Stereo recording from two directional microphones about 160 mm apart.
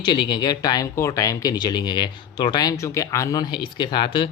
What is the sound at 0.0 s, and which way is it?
Speech, 30° left (ahead or behind).